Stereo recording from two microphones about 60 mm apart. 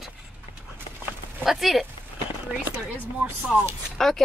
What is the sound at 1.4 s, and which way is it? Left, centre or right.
Speech, centre.